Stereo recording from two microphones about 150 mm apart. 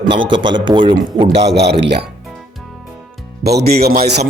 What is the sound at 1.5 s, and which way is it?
Speech, 90° right.